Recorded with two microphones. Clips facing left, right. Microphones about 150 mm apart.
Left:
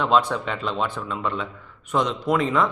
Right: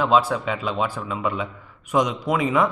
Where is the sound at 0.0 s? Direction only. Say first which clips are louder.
Right 1 dB; 5° right (ahead or behind).